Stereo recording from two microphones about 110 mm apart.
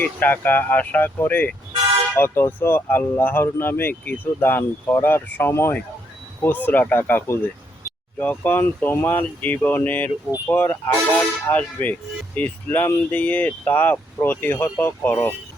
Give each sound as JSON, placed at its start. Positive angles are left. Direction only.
{"t": 0.0, "sound": "speech", "side_deg": 15}